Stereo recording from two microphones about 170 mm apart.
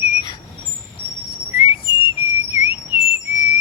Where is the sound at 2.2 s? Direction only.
20° right (ahead or behind).